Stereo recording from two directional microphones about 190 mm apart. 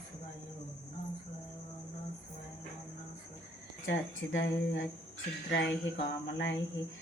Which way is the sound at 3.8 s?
75° left (ahead or behind).